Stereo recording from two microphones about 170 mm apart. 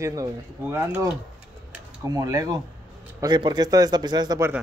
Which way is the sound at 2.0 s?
20° right (ahead or behind).